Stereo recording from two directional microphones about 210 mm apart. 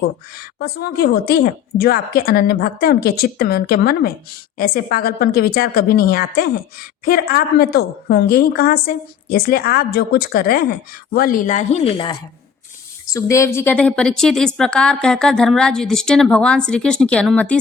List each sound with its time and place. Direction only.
0.6 s a woman's voice: 45° left (ahead or behind); by 12.1 s 25° left (ahead or behind)
13.1 s a woman's voice: 15° left (ahead or behind)